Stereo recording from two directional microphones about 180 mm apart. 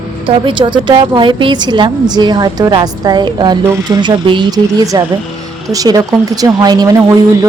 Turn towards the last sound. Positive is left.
turn(degrees=-20)  # may be behind; listen again after turning